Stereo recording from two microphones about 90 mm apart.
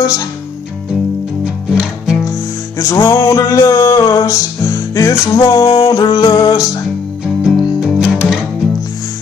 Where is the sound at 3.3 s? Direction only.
35° left (ahead or behind).